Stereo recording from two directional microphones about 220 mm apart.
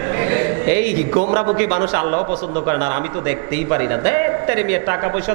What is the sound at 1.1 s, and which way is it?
A man's voice, 25° right (ahead or behind).